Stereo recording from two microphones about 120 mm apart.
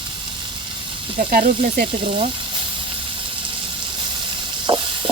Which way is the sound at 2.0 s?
50° right (ahead or behind).